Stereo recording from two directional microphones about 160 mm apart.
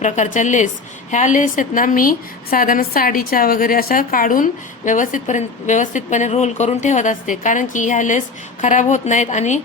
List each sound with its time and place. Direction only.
0.0 s a woman's voice: 50° left (ahead or behind)